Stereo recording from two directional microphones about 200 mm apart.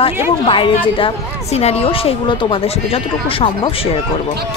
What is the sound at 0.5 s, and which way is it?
A woman's voice, 25° left (ahead or behind).